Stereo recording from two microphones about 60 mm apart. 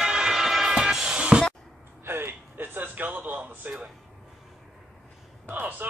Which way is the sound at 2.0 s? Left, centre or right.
Right.